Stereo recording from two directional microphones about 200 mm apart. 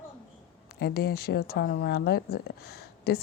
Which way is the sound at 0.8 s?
55° left (ahead or behind).